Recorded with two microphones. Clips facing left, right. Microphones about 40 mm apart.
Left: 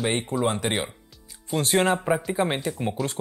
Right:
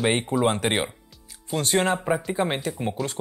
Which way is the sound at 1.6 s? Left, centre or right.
Left.